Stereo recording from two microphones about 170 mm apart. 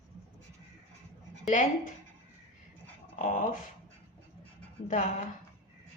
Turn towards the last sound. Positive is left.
turn(degrees=45)  # may be behind; listen again after turning